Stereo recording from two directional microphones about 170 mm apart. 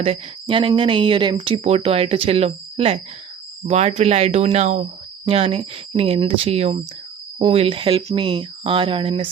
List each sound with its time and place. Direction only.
0.0 s speech: 30° right (ahead or behind)